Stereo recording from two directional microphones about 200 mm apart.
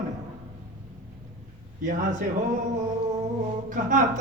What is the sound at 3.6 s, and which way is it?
Speech, 40° right (ahead or behind).